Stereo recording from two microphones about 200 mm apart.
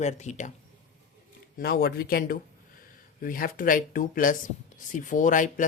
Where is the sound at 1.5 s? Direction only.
50° left (ahead or behind).